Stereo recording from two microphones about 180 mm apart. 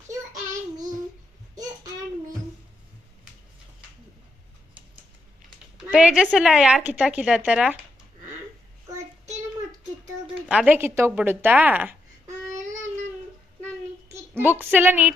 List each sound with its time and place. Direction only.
5.7 s a woman's voice: 5° right (ahead or behind)
10.5 s a woman's voice: 5° right (ahead or behind)
12.3 s a sound: 40° right (ahead or behind)
14.1 s speech: 10° right (ahead or behind)